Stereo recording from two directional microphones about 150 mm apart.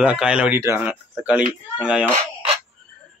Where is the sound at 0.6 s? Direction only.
20° right (ahead or behind).